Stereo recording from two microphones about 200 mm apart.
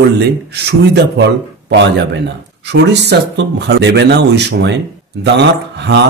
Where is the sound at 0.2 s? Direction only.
55° right (ahead or behind).